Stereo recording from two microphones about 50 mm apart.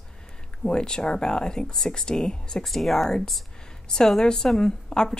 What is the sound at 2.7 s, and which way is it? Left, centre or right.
A woman's voice, centre.